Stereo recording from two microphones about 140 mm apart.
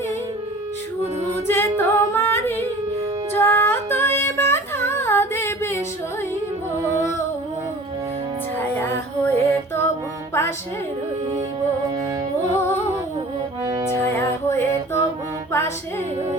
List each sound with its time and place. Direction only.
1.5 s singing: 15° left (ahead or behind)
3.3 s a sound: 15° left (ahead or behind)
8.5 s music: 15° left (ahead or behind)
13.7 s music: 20° right (ahead or behind)
14.2 s music: 15° left (ahead or behind)